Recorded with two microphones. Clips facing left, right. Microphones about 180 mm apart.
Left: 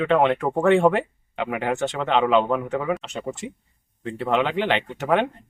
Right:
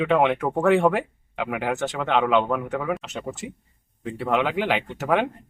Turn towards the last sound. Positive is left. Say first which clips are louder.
# left 1 dB
turn(degrees=0)  # may be behind; listen again after turning